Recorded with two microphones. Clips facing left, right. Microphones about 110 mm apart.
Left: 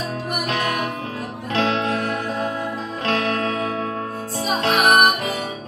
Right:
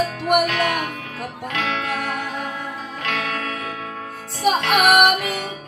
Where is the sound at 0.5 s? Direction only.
30° left (ahead or behind).